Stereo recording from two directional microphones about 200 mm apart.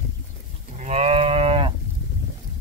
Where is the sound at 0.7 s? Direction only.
35° right (ahead or behind).